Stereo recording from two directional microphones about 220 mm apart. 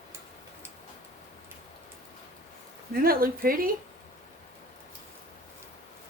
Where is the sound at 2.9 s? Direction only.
40° right (ahead or behind).